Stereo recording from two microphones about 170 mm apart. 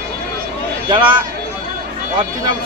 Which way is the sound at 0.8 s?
30° right (ahead or behind).